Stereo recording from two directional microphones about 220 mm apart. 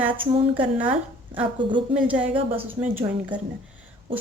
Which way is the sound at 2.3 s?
25° right (ahead or behind).